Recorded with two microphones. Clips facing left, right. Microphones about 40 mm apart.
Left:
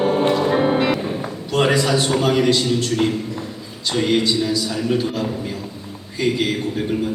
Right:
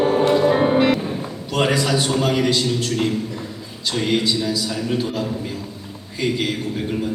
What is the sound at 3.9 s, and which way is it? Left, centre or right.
Speech, centre.